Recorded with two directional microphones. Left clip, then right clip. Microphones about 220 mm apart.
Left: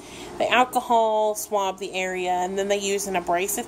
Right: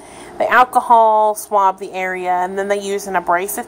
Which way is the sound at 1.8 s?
30° right (ahead or behind).